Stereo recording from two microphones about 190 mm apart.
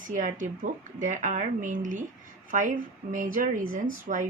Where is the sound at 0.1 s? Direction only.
45° right (ahead or behind).